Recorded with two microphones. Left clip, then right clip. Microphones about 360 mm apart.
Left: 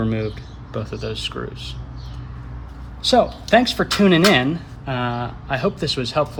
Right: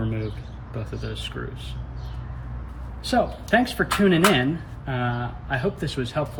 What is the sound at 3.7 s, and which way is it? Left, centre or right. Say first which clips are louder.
A man's voice: left 4 dB; centre.